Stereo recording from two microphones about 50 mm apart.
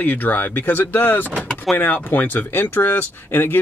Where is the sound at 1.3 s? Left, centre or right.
Centre.